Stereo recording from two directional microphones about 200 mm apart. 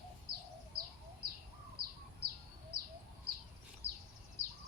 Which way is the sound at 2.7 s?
50° right (ahead or behind).